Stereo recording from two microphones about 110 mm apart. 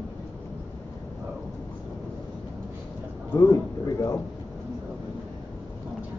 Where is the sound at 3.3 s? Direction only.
30° left (ahead or behind).